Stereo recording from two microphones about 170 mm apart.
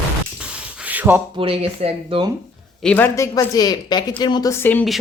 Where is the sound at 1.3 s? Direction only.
35° right (ahead or behind).